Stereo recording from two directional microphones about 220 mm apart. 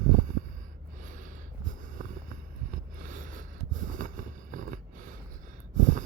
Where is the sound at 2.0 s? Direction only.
40° right (ahead or behind).